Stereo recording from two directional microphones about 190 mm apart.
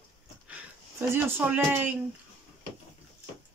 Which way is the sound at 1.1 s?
10° right (ahead or behind).